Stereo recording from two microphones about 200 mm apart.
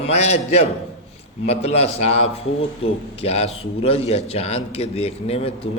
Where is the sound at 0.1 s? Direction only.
35° left (ahead or behind).